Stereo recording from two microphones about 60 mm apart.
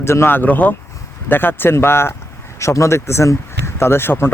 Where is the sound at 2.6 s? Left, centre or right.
Left.